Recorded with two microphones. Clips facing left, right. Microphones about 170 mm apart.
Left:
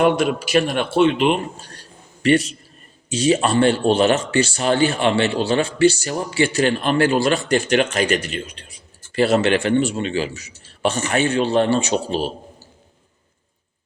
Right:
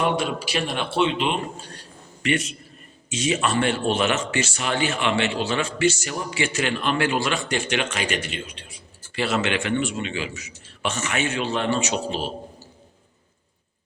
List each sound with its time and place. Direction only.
0.0 s a man's voice: 50° left (ahead or behind)
2.2 s a man's voice: 35° left (ahead or behind)